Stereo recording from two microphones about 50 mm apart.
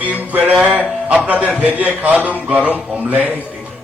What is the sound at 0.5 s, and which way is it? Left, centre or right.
A man's voice, right.